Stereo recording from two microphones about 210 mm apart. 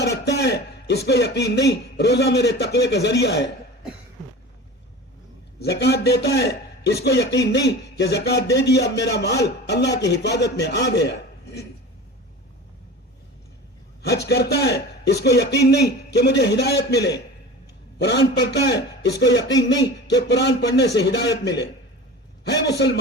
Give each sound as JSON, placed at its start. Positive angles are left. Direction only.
{"t": 0.0, "sound": "a man's voice", "side_deg": 55}
{"t": 5.5, "sound": "a man's voice", "side_deg": 50}
{"t": 14.0, "sound": "a man's voice", "side_deg": 50}